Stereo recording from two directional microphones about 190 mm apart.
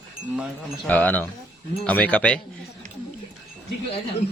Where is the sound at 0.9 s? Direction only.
10° left (ahead or behind).